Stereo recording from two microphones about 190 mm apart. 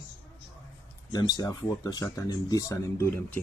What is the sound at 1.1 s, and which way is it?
Speech, 20° left (ahead or behind).